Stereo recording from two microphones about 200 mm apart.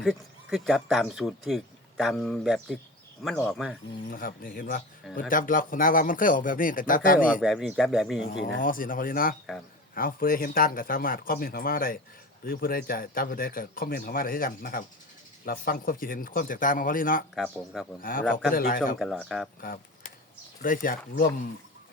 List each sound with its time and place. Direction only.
0.0 s speech: centre (ahead or behind)
4.1 s speech: 45° left (ahead or behind)
7.3 s speech: centre (ahead or behind)
8.5 s speech: 45° left (ahead or behind)
17.3 s speech: centre (ahead or behind)
18.0 s speech: 45° left (ahead or behind)
18.9 s speech: 5° left (ahead or behind)
20.6 s speech: 45° left (ahead or behind)